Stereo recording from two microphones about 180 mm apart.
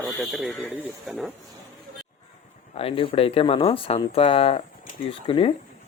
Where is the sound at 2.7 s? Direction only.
30° left (ahead or behind).